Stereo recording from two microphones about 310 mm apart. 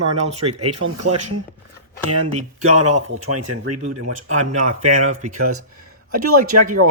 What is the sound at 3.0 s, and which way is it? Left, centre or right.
Speech, right.